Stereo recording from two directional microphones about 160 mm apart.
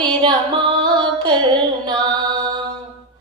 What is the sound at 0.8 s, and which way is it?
Music, 30° right (ahead or behind).